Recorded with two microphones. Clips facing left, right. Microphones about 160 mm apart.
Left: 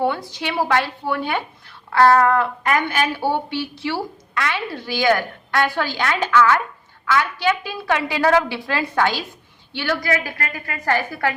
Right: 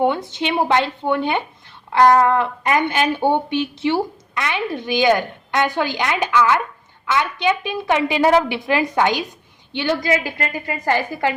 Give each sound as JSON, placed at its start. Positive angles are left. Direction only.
{"t": 0.0, "sound": "a woman's voice", "side_deg": -20}